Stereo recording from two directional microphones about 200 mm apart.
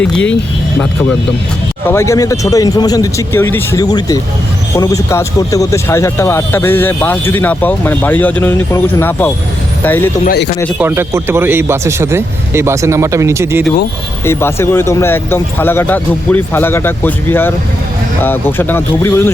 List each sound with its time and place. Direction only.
1.9 s speech: 15° left (ahead or behind)
10.2 s speech: 55° left (ahead or behind)
10.8 s speech: 10° right (ahead or behind)
14.3 s speech: 10° left (ahead or behind)